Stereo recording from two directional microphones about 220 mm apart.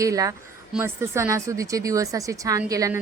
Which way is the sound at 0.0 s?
15° right (ahead or behind).